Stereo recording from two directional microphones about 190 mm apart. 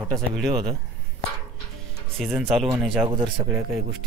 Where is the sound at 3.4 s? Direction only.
5° right (ahead or behind).